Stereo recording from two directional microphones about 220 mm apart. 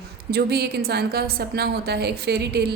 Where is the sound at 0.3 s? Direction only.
45° right (ahead or behind).